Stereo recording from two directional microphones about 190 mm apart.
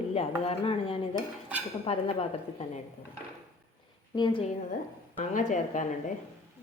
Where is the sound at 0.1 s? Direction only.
30° left (ahead or behind).